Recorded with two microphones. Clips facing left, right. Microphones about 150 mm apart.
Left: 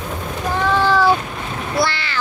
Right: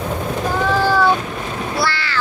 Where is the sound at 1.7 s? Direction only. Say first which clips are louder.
Left 3 dB; 20° left (ahead or behind).